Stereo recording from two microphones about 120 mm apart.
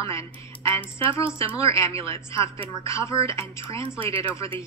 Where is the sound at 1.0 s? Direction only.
50° right (ahead or behind).